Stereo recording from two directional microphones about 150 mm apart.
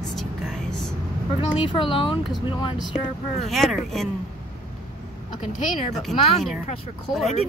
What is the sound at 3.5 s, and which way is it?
Speech, centre (ahead or behind).